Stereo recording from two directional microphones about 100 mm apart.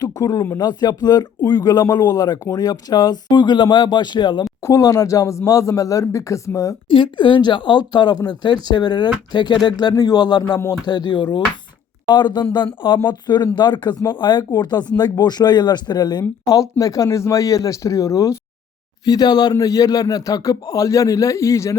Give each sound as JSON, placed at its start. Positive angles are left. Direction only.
{"t": 0.0, "sound": "a sound", "side_deg": 40}
{"t": 0.5, "sound": "speech", "side_deg": 45}
{"t": 4.6, "sound": "speech", "side_deg": 35}
{"t": 6.8, "sound": "speech", "side_deg": 55}
{"t": 16.5, "sound": "speech", "side_deg": 35}